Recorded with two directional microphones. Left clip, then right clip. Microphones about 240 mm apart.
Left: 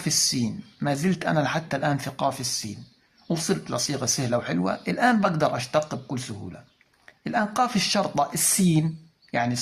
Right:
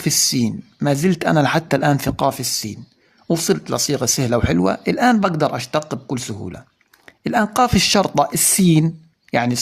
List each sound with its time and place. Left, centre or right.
0.0 s speech: right